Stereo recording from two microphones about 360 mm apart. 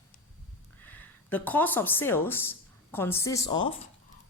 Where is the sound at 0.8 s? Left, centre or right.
Centre.